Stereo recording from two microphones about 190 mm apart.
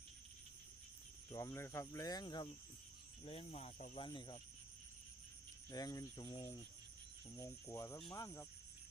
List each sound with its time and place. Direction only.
1.3 s cricket: 15° left (ahead or behind); by 3.9 s 35° left (ahead or behind)
3.9 s cricket: 25° left (ahead or behind)
5.7 s cricket: 20° left (ahead or behind)